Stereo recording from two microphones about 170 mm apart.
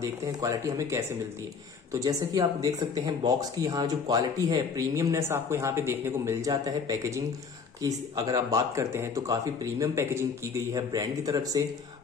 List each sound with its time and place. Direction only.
0.0 s speech: 20° right (ahead or behind)